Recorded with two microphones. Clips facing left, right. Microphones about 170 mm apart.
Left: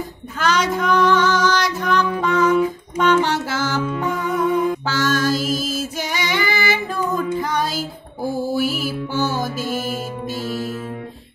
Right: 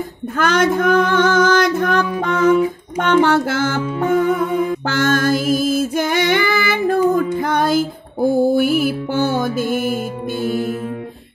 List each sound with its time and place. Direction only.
0.4 s female singing: 50° right (ahead or behind)
2.2 s music: 55° right (ahead or behind)